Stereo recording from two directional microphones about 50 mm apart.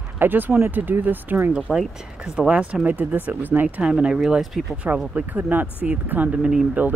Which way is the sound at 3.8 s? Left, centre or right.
Centre.